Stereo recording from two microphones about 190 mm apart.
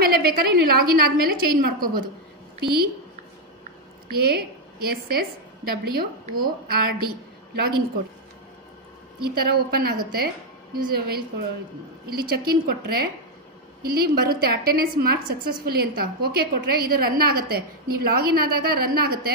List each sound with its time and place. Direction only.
0.0 s a woman's voice: 55° right (ahead or behind)
4.1 s a woman's voice: 55° right (ahead or behind)
9.3 s a woman's voice: 55° right (ahead or behind)